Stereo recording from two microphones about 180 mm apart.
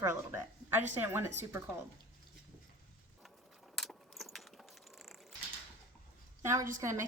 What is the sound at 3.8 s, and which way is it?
Keys jangling, centre (ahead or behind).